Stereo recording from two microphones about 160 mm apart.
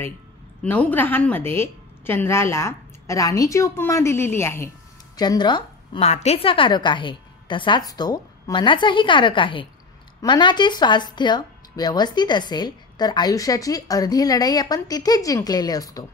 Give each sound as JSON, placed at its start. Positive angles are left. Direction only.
{"t": 0.6, "sound": "a woman's voice", "side_deg": 10}
{"t": 5.9, "sound": "a woman's voice", "side_deg": 40}